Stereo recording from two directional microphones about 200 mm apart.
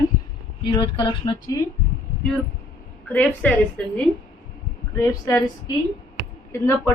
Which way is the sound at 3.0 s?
5° left (ahead or behind).